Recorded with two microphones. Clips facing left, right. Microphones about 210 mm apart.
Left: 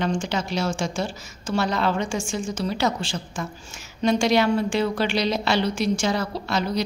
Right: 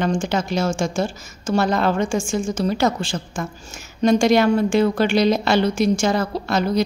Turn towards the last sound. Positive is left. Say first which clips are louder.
# right 5 dB
turn(degrees=-50)  # may be behind; listen again after turning